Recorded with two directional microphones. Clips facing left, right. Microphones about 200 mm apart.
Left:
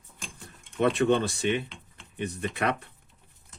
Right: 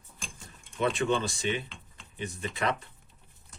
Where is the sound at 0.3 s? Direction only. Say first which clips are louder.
Left 5 dB; 60° left (ahead or behind).